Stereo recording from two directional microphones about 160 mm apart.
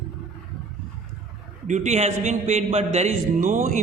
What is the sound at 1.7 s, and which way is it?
Speech, 45° right (ahead or behind).